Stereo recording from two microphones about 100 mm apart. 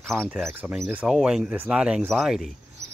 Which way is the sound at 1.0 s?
5° right (ahead or behind).